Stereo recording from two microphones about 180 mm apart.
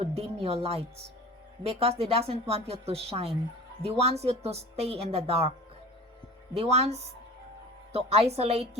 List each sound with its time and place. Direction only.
0.0 s a woman's voice: 35° right (ahead or behind)